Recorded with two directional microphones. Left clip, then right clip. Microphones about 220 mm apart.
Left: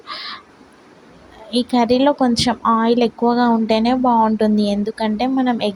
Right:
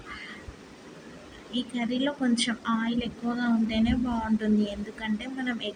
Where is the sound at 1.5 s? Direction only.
30° left (ahead or behind).